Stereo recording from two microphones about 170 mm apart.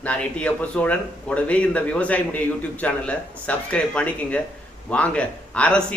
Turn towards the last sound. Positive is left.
turn(degrees=5)  # may be behind; listen again after turning